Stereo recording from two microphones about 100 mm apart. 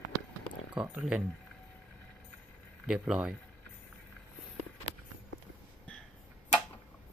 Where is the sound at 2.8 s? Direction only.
10° right (ahead or behind).